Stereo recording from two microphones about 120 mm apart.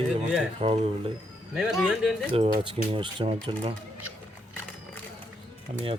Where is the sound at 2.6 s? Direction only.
45° right (ahead or behind).